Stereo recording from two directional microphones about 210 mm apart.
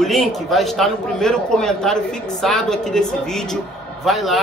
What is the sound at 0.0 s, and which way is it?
A man's voice, centre (ahead or behind).